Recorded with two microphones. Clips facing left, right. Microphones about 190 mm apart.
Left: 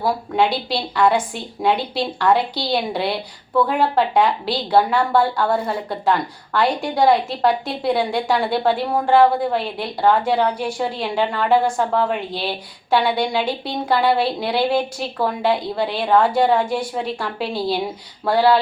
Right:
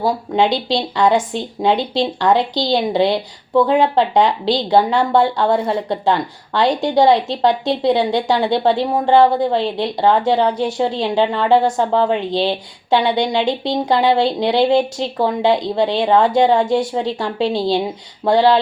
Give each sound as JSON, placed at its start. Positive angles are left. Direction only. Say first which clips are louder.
{"t": 0.0, "sound": "speech", "louder": "right 3 dB", "side_deg": -25}